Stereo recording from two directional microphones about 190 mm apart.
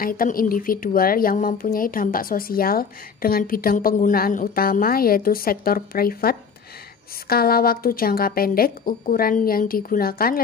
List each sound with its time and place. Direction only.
0.0 s speech: 50° left (ahead or behind)